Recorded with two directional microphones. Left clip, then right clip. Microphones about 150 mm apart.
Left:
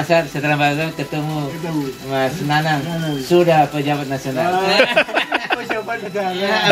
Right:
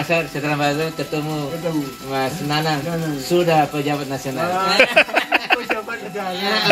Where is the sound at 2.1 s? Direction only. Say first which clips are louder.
Left 3 dB; 15° left (ahead or behind).